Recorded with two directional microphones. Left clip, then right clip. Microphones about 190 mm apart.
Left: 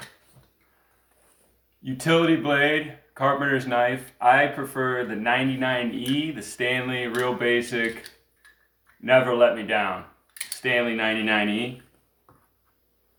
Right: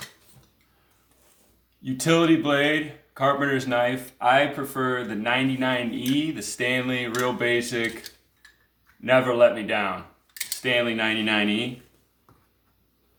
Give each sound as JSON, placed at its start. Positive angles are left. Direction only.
{"t": 1.8, "sound": "speech", "side_deg": -35}
{"t": 9.0, "sound": "speech", "side_deg": -35}